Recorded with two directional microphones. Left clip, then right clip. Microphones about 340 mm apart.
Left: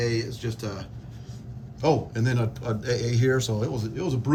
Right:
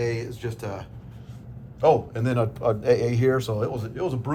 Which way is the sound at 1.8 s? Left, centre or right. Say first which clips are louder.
Right 4 dB; centre.